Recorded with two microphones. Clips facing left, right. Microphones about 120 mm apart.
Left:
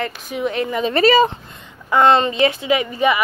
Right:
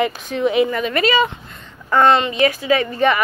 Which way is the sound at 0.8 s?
35° left (ahead or behind).